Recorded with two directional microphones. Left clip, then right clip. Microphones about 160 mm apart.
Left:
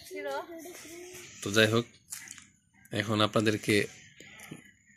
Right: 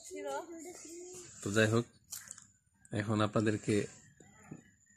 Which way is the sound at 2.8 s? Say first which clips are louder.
Left 6 dB; 10° right (ahead or behind).